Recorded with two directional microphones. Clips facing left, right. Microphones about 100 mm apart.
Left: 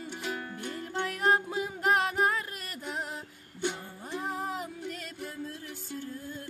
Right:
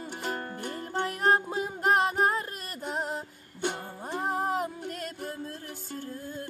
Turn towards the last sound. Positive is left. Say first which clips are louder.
# right 3 dB
turn(degrees=-45)  # may be behind; listen again after turning